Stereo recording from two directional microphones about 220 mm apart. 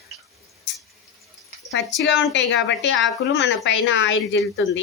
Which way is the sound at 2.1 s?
55° left (ahead or behind).